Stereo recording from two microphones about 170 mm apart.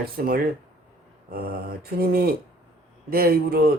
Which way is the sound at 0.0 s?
65° right (ahead or behind).